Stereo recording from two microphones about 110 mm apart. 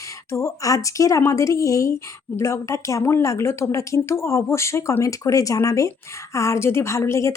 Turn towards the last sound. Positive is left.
turn(degrees=25)  # may be behind; listen again after turning